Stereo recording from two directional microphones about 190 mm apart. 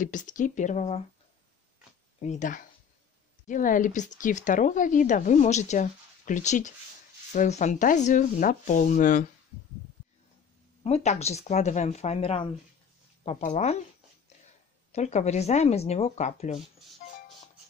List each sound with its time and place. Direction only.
0.0 s speech: 40° left (ahead or behind)
2.2 s speech: 40° left (ahead or behind)
10.8 s speech: 35° left (ahead or behind)
14.9 s speech: 35° left (ahead or behind)
17.0 s music: 45° left (ahead or behind)